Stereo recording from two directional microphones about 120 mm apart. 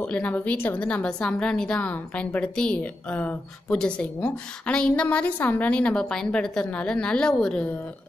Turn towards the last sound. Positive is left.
turn(degrees=10)  # may be behind; listen again after turning